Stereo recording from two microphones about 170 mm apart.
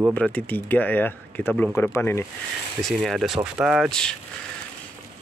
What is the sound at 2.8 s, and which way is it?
Speech, centre (ahead or behind).